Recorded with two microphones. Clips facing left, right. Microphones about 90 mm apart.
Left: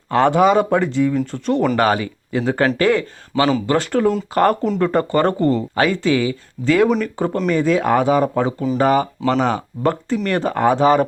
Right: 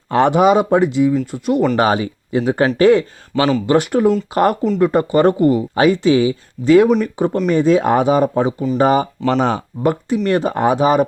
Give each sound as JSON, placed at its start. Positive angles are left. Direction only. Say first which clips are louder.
{"t": 0.1, "sound": "speech", "louder": "right 1 dB", "side_deg": -20}
{"t": 1.7, "sound": "speech", "louder": "right 1 dB", "side_deg": -20}
{"t": 9.8, "sound": "speech", "louder": "right 3 dB", "side_deg": -15}